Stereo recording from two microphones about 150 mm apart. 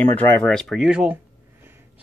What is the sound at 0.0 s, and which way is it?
Speech, 10° left (ahead or behind).